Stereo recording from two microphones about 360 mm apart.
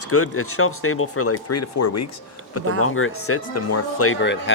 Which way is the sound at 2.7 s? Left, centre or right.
Left.